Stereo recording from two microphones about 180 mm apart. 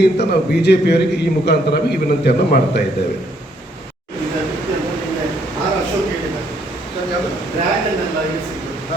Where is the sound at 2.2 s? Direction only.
65° left (ahead or behind).